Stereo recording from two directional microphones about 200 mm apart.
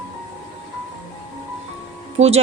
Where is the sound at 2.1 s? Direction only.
30° right (ahead or behind).